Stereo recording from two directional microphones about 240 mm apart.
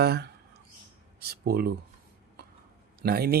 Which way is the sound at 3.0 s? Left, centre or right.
Right.